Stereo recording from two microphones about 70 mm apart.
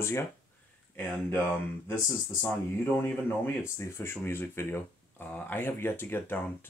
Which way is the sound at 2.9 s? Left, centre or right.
Left.